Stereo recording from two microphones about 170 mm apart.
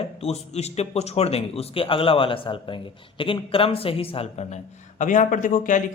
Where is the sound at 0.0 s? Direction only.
35° left (ahead or behind).